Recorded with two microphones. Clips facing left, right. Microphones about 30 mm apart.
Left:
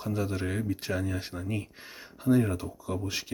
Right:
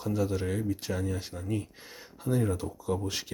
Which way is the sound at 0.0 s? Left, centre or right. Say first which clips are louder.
Right 1 dB; centre.